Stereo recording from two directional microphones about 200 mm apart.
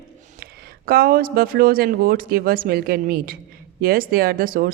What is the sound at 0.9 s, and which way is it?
A woman's voice, 50° right (ahead or behind).